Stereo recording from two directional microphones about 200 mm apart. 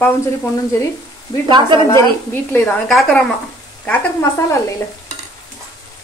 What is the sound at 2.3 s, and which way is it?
Speech, 10° left (ahead or behind).